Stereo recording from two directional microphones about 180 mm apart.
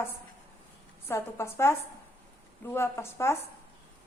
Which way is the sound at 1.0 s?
15° left (ahead or behind).